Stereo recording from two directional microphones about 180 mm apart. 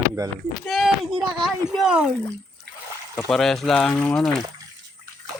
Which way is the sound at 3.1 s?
Centre (ahead or behind).